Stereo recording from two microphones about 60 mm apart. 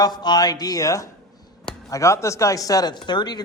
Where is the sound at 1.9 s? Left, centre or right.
Left.